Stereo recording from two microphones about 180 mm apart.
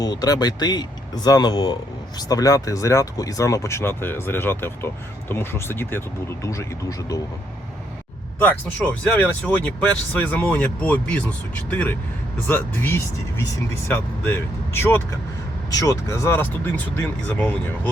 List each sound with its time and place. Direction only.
0.0 s speech: 20° left (ahead or behind)
9.0 s speech: 5° left (ahead or behind)